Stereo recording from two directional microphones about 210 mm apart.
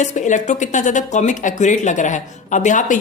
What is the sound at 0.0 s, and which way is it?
Speech, 35° left (ahead or behind).